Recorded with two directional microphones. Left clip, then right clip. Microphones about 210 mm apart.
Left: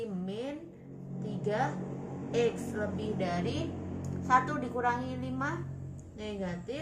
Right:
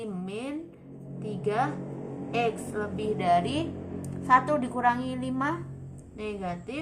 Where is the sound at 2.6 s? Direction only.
40° right (ahead or behind).